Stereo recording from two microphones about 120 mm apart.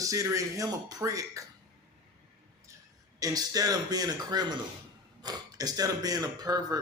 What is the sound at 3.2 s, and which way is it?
Speech, 30° right (ahead or behind).